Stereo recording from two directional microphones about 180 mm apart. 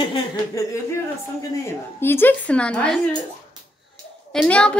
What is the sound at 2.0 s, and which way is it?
A woman's voice, 10° left (ahead or behind).